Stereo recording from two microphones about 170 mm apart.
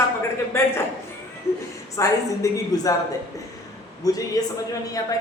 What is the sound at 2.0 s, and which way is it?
Speech, 20° left (ahead or behind).